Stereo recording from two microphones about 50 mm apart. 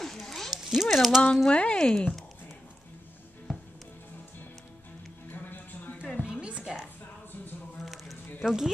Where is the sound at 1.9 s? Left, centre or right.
Centre.